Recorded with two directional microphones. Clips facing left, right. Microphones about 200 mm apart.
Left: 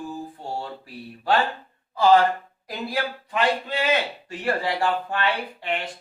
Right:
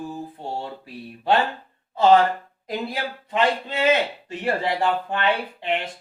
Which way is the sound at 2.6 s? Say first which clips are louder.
Even; 25° right (ahead or behind).